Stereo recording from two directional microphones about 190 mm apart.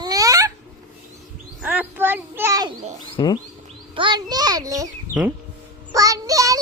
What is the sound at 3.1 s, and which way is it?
Bird, 20° left (ahead or behind).